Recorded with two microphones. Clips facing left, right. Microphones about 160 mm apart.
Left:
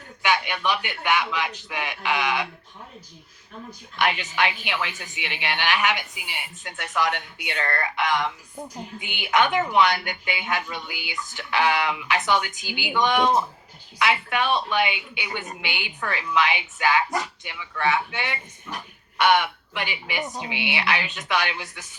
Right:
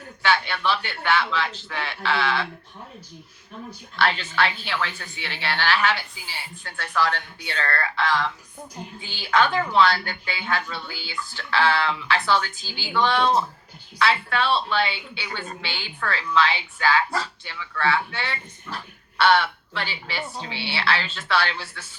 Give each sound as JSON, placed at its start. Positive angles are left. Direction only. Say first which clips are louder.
{"t": 0.2, "sound": "a woman's voice", "louder": "right 1 dB", "side_deg": 15}
{"t": 3.9, "sound": "a woman's voice", "louder": "right 1 dB", "side_deg": 15}